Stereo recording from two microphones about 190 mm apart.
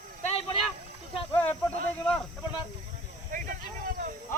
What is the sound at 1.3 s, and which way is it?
Speech, 10° left (ahead or behind).